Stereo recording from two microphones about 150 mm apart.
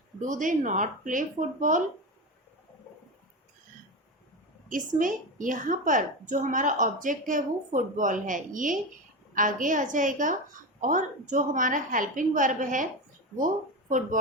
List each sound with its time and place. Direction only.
0.2 s a woman's voice: 60° right (ahead or behind)
4.7 s a woman's voice: 60° right (ahead or behind)